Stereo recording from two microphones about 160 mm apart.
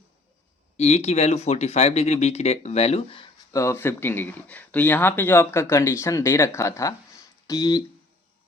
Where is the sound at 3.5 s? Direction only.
20° left (ahead or behind).